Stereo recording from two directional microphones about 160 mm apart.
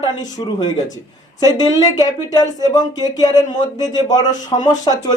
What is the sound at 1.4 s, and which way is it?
Speech, 25° left (ahead or behind).